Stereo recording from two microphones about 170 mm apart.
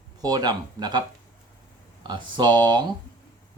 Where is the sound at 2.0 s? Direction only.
25° right (ahead or behind).